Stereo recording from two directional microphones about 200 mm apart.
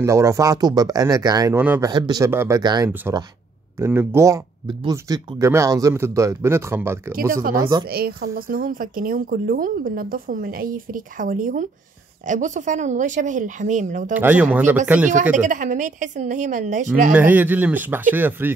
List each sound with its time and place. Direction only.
0.0 s speech: 15° right (ahead or behind)
1.9 s speech: 20° right (ahead or behind)
7.9 s speech: 50° right (ahead or behind)
14.1 s speech: 10° right (ahead or behind)
15.3 s speech: 40° right (ahead or behind)
17.1 s speech: 10° right (ahead or behind)